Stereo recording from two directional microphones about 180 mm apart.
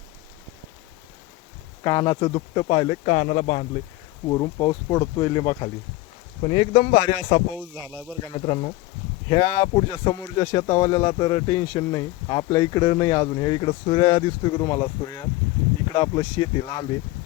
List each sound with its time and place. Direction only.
1.8 s speech: 20° left (ahead or behind); by 3.7 s 35° left (ahead or behind)
4.3 s speech: 20° left (ahead or behind); by 7.4 s 35° left (ahead or behind)
7.5 s speech: 10° right (ahead or behind)
8.2 s speech: 30° left (ahead or behind)